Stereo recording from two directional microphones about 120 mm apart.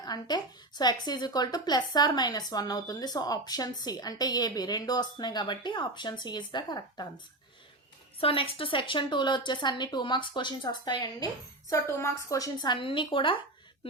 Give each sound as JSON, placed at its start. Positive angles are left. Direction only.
{"t": 0.0, "sound": "a woman's voice", "side_deg": 35}
{"t": 8.2, "sound": "a woman's voice", "side_deg": 50}
{"t": 11.7, "sound": "a woman's voice", "side_deg": 25}